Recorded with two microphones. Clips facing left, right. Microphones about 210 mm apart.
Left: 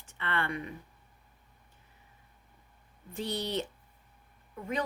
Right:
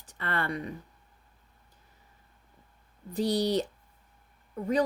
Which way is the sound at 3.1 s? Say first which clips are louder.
Right 7 dB; 35° right (ahead or behind).